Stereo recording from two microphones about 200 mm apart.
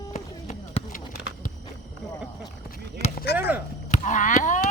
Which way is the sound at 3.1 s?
50° left (ahead or behind).